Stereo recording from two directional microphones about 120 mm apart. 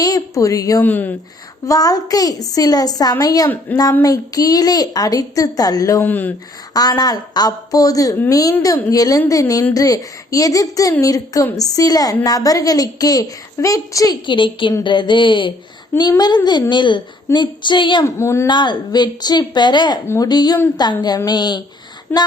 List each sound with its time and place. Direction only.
0.0 s a woman's voice: 30° left (ahead or behind)
0.8 s speech: 15° left (ahead or behind)
1.6 s a woman's voice: 30° left (ahead or behind)
6.1 s speech: 15° left (ahead or behind)
6.7 s a woman's voice: 30° left (ahead or behind)
14.3 s a woman's voice: 45° left (ahead or behind)
18.0 s a woman's voice: 25° left (ahead or behind)
18.4 s a woman's voice: 40° left (ahead or behind)
22.1 s speech: 15° left (ahead or behind)